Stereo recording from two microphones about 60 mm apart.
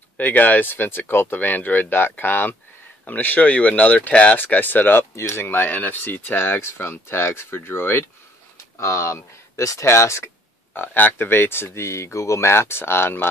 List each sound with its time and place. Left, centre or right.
0.2 s speech: left
5.1 s speech: left
8.7 s speech: left
10.9 s speech: left